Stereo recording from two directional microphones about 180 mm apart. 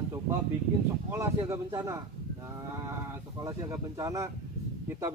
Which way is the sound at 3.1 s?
15° right (ahead or behind).